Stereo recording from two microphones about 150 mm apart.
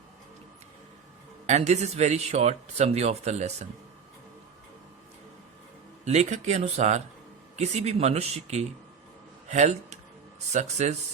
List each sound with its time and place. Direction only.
1.5 s speech: 50° right (ahead or behind)
6.1 s speech: 50° right (ahead or behind)